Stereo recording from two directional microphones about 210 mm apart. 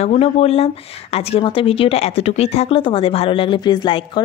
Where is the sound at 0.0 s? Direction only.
30° left (ahead or behind).